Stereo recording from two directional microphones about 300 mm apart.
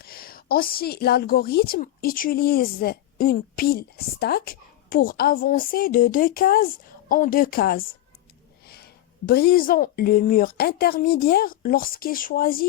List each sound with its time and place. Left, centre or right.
0.0 s a woman's voice: left